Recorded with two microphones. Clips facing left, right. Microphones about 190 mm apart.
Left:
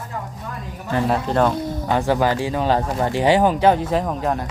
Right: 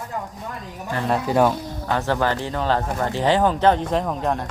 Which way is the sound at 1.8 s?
15° left (ahead or behind).